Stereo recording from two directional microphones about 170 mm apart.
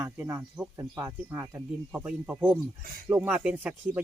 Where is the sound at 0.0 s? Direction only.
15° right (ahead or behind).